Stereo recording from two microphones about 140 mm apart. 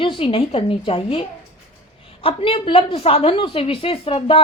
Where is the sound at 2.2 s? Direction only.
40° left (ahead or behind).